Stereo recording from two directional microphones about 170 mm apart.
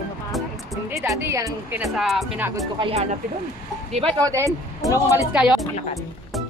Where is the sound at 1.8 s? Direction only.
Centre (ahead or behind).